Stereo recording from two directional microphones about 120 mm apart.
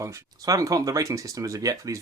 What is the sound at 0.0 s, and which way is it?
Speech, 25° right (ahead or behind).